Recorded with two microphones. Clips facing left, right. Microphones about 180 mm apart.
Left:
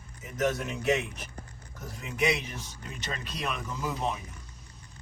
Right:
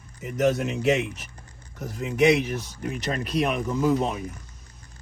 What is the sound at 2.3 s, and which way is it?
Speech, 70° right (ahead or behind).